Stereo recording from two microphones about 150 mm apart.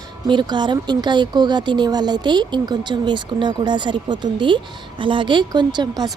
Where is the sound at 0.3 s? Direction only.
30° right (ahead or behind).